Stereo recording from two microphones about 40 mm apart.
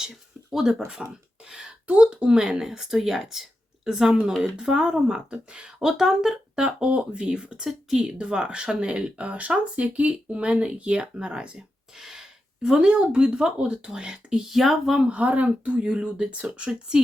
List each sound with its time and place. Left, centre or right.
0.1 s a sound: centre
0.7 s speech: centre
1.5 s a sound: right
1.9 s speech: right
7.7 s speech: centre
8.0 s speech: right
11.9 s speech: centre
14.5 s speech: centre
15.1 s speech: right